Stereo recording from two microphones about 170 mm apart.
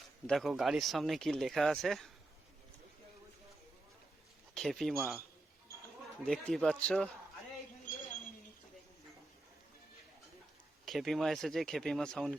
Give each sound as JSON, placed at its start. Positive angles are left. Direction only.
{"t": 0.3, "sound": "speech", "side_deg": 0}
{"t": 4.5, "sound": "speech", "side_deg": 0}
{"t": 6.2, "sound": "speech", "side_deg": 5}
{"t": 10.8, "sound": "speech", "side_deg": 0}